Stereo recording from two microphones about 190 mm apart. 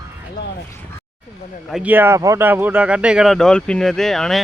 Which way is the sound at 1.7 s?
5° right (ahead or behind).